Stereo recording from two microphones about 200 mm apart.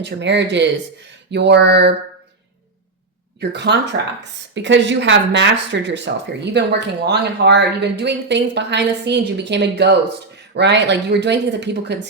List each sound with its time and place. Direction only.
0.0 s speech: 60° right (ahead or behind)
3.5 s speech: 60° right (ahead or behind)